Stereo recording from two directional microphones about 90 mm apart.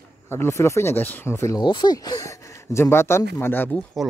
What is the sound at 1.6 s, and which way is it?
Speech, 55° left (ahead or behind).